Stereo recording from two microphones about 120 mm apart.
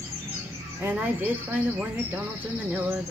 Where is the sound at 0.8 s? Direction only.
15° right (ahead or behind).